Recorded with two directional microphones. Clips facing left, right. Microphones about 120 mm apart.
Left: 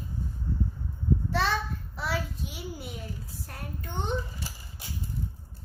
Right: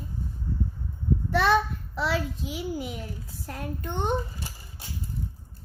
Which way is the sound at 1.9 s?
90° right.